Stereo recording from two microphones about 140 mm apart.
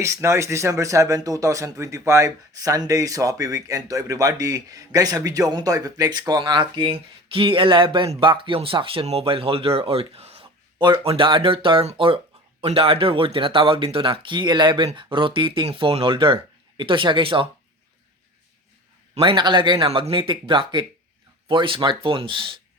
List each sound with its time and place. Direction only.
0.0 s speech: 20° right (ahead or behind); by 17.5 s 40° right (ahead or behind)
19.1 s speech: 40° right (ahead or behind)